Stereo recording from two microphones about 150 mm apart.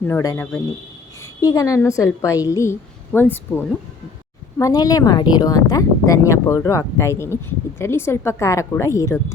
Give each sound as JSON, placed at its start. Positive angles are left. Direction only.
{"t": 0.0, "sound": "a woman's voice", "side_deg": 20}